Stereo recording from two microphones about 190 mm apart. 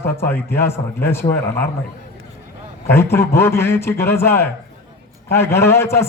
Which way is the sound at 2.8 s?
10° left (ahead or behind).